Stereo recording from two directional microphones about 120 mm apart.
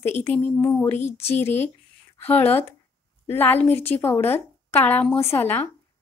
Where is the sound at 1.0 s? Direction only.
60° left (ahead or behind).